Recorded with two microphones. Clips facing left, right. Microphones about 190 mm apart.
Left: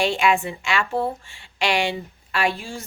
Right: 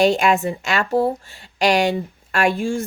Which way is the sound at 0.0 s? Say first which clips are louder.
Right 4 dB; 40° right (ahead or behind).